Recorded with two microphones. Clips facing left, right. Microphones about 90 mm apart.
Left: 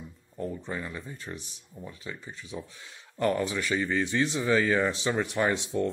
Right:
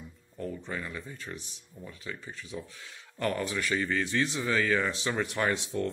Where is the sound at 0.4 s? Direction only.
20° left (ahead or behind).